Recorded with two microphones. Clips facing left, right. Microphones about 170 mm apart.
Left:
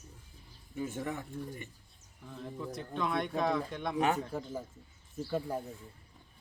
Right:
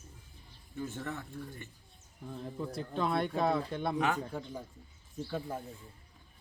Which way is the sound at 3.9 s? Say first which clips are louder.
Left 3 dB; 25° left (ahead or behind).